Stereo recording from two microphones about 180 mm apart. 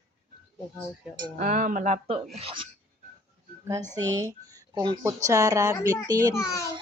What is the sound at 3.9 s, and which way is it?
Speech, 20° right (ahead or behind).